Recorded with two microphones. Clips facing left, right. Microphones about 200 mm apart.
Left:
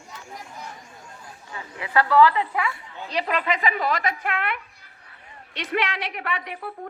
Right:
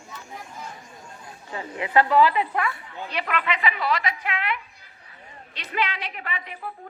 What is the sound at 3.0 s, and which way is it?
A woman's voice, 35° left (ahead or behind).